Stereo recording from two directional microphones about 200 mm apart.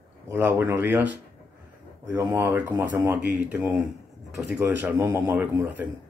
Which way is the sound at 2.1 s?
10° right (ahead or behind).